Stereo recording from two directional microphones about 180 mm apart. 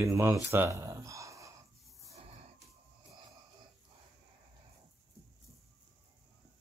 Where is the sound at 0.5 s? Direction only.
15° right (ahead or behind).